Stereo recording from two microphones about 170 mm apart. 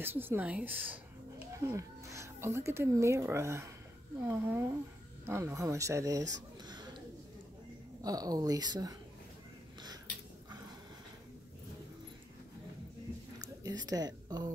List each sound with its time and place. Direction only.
0.0 s a man's voice: 10° right (ahead or behind)
8.0 s speech: 20° right (ahead or behind)
13.7 s speech: 20° right (ahead or behind)